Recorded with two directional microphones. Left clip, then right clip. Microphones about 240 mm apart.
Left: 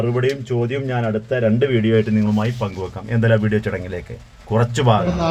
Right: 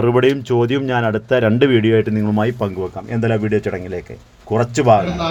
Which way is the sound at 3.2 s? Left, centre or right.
Centre.